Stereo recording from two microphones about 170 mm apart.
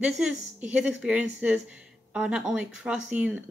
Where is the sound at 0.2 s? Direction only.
5° right (ahead or behind).